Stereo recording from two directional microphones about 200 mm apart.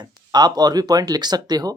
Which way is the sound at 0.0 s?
20° right (ahead or behind).